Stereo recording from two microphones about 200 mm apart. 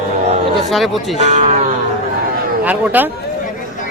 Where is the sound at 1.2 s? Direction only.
35° right (ahead or behind).